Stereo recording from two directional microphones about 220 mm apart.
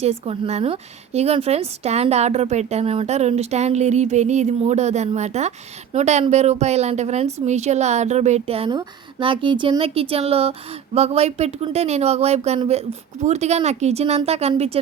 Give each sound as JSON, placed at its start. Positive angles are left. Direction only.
{"t": 0.0, "sound": "a woman's voice", "side_deg": -30}